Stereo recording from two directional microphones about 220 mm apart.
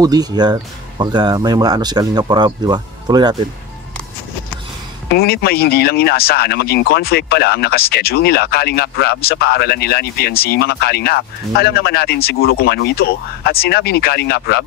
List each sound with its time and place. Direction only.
0.0 s speech: 15° right (ahead or behind)
5.1 s speech: 45° left (ahead or behind)